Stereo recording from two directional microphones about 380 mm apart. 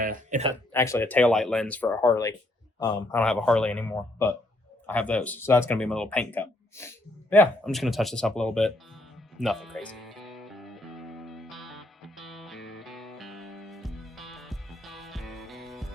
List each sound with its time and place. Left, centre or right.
0.0 s speech: centre
0.7 s speech: centre
9.4 s music: centre
12.5 s music: left
12.8 s music: centre